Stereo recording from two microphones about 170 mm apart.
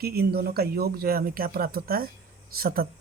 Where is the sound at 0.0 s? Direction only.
65° right (ahead or behind).